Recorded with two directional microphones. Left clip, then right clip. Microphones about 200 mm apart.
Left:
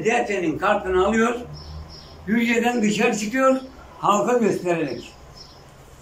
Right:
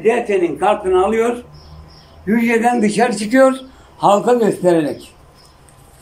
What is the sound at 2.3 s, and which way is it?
Speech, 25° right (ahead or behind).